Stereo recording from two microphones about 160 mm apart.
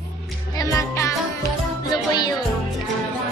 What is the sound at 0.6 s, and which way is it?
Music, 20° left (ahead or behind).